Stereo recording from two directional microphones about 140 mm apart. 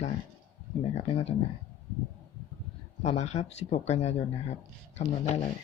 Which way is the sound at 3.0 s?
50° left (ahead or behind).